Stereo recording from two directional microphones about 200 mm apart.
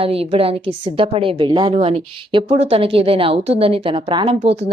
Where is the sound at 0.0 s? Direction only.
30° right (ahead or behind).